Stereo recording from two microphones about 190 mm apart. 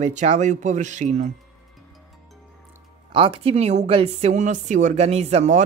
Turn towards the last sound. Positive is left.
turn(degrees=-35)  # may be behind; listen again after turning